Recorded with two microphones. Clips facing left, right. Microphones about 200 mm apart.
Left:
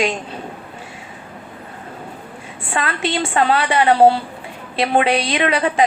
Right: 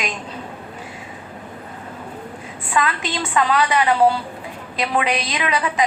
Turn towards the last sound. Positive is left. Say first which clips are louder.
# left 5 dB
turn(degrees=30)  # may be behind; listen again after turning